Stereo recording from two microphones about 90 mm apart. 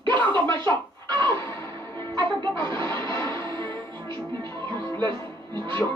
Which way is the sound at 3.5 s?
25° left (ahead or behind).